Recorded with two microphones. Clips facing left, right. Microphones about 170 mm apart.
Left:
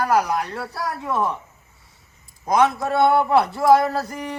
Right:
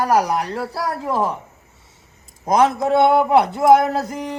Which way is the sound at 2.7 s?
20° right (ahead or behind).